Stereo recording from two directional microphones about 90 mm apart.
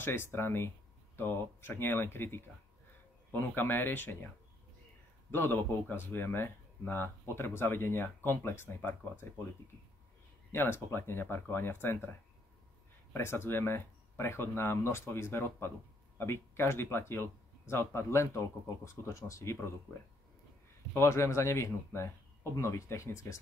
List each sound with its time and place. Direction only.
0.0 s speech: 25° left (ahead or behind)
5.3 s speech: 25° left (ahead or behind)
10.5 s speech: 25° left (ahead or behind)
13.1 s speech: 30° left (ahead or behind)
20.9 s speech: 30° left (ahead or behind)